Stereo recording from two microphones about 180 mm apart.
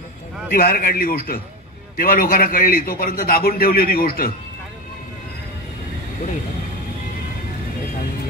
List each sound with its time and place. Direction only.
0.6 s a man's voice: 55° left (ahead or behind)